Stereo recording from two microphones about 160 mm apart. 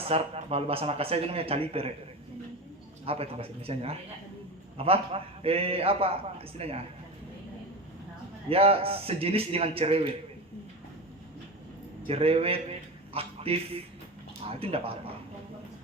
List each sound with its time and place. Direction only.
0.1 s a man's voice: 40° right (ahead or behind)
3.1 s a man's voice: 35° right (ahead or behind)
8.4 s a man's voice: 35° right (ahead or behind)
12.0 s a man's voice: 35° right (ahead or behind)
13.1 s a sound: 35° right (ahead or behind)
14.4 s a man's voice: 35° right (ahead or behind)